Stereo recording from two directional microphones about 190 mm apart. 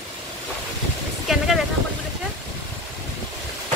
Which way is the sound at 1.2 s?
Centre (ahead or behind).